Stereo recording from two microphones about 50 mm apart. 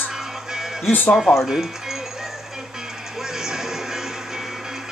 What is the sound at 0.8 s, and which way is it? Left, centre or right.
Speech, left.